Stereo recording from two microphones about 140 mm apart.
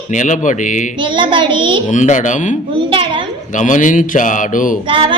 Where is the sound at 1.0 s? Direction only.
35° right (ahead or behind).